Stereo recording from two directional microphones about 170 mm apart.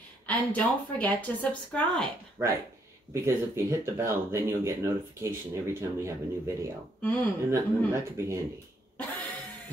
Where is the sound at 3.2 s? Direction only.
15° right (ahead or behind).